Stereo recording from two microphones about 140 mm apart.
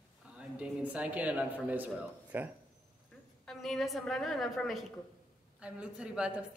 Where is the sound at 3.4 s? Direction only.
Centre (ahead or behind).